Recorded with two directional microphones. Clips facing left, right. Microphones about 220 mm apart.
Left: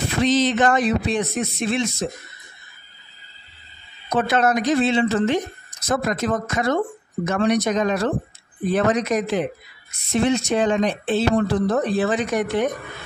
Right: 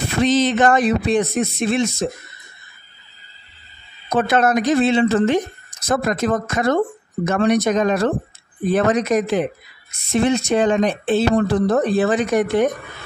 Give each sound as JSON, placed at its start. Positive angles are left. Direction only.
{"t": 0.2, "sound": "speech", "side_deg": -50}
{"t": 4.1, "sound": "speech", "side_deg": -50}